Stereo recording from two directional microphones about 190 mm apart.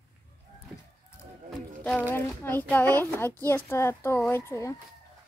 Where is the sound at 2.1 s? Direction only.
10° left (ahead or behind).